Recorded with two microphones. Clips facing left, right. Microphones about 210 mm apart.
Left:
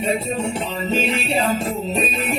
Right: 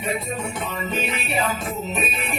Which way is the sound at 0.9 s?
30° left (ahead or behind).